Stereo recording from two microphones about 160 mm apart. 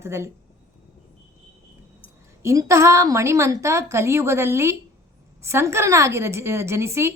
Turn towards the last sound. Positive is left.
turn(degrees=-15)  # may be behind; listen again after turning